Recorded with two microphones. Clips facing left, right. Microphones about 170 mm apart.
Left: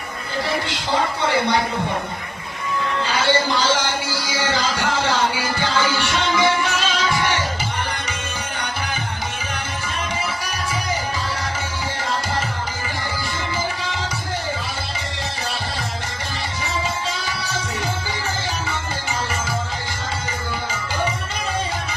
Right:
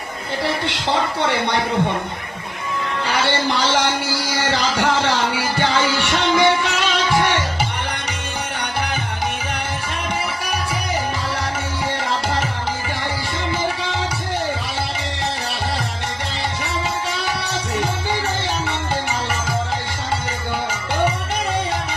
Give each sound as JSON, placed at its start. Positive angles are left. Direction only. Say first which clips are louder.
{"t": 0.7, "sound": "speech", "louder": "right 1 dB", "side_deg": -65}
{"t": 3.1, "sound": "music", "louder": "even", "side_deg": -60}